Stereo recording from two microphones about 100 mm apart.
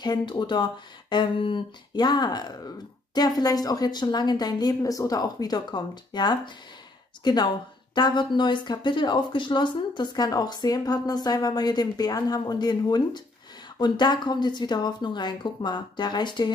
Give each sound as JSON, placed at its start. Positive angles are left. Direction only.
{"t": 0.0, "sound": "speech", "side_deg": 45}